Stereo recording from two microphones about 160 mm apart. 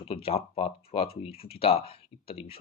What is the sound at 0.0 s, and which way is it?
Speech, 35° left (ahead or behind).